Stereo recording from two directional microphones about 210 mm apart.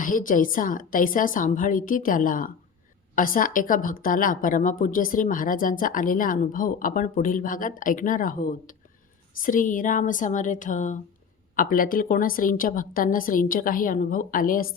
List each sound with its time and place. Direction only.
0.0 s a woman's voice: 40° left (ahead or behind)